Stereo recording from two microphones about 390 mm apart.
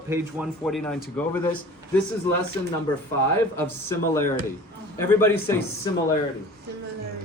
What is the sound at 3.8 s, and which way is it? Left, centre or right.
Speech, left.